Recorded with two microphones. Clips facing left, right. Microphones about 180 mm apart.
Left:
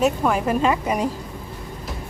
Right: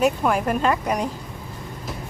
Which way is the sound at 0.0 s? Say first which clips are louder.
Even; centre (ahead or behind).